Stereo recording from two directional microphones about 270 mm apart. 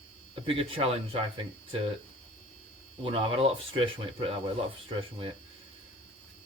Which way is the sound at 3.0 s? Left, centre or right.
Centre.